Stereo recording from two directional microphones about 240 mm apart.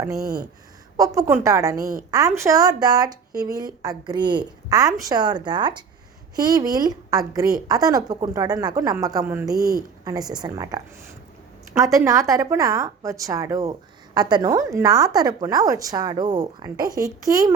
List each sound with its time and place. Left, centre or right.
0.0 s a woman's voice: centre